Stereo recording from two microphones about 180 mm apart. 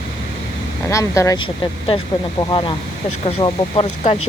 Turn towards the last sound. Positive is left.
turn(degrees=30)  # may be behind; listen again after turning